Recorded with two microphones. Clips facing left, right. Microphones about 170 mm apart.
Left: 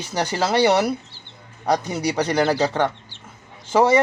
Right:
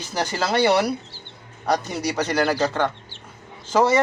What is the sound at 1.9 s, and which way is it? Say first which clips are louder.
Speech: left 2 dB; 10° left (ahead or behind).